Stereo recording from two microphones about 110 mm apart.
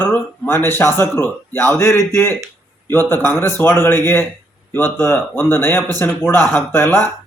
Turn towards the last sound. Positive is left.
turn(degrees=20)  # may be behind; listen again after turning